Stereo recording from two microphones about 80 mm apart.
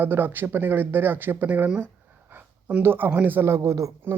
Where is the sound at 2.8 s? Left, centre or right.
Right.